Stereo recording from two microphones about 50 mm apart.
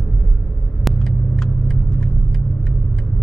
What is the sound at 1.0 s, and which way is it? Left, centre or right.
Vehicle, centre.